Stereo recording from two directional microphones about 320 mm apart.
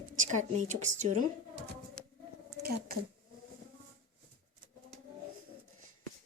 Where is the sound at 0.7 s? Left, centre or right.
Right.